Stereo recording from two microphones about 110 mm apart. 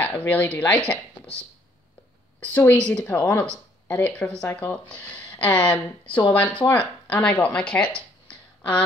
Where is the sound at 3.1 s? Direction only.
25° left (ahead or behind).